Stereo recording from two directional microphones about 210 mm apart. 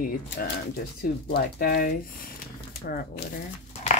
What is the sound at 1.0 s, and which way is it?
Speech, 45° left (ahead or behind).